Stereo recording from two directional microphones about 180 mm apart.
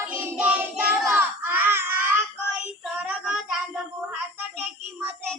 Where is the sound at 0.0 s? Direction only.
10° right (ahead or behind).